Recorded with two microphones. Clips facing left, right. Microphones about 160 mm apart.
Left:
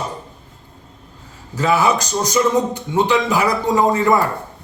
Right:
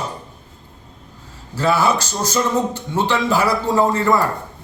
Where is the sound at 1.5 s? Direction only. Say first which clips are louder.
Left 1 dB; 15° left (ahead or behind).